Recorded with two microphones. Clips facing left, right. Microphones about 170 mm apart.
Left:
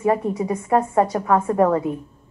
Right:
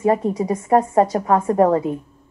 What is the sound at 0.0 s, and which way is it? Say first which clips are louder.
A woman's voice: right 2 dB; 25° right (ahead or behind).